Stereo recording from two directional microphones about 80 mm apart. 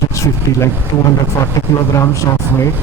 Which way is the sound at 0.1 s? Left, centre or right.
Left.